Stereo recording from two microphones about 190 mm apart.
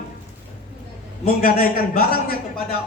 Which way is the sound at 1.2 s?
50° left (ahead or behind).